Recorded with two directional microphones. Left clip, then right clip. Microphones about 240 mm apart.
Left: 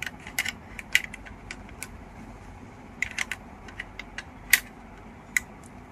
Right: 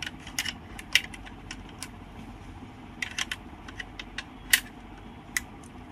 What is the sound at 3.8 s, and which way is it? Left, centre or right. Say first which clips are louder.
Vehicle: even; centre.